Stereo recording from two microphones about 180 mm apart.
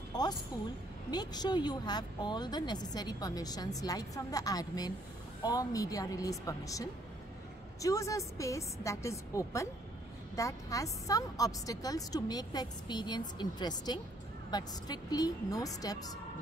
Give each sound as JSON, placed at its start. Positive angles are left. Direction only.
{"t": 0.1, "sound": "music", "side_deg": 20}
{"t": 1.1, "sound": "a woman's voice", "side_deg": 25}